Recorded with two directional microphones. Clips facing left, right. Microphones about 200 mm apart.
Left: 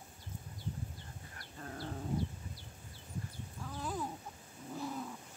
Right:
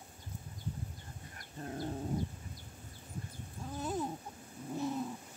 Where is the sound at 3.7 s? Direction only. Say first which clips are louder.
Right 4 dB; 25° right (ahead or behind).